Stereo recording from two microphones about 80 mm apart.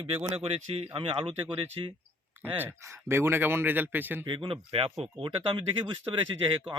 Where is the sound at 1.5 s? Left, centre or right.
Right.